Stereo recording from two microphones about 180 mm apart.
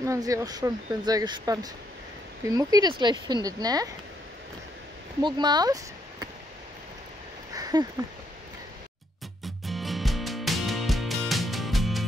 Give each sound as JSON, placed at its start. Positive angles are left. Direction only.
{"t": 0.0, "sound": "speech", "side_deg": -20}
{"t": 5.2, "sound": "speech", "side_deg": -25}
{"t": 7.5, "sound": "a sound", "side_deg": -20}
{"t": 9.4, "sound": "music", "side_deg": 0}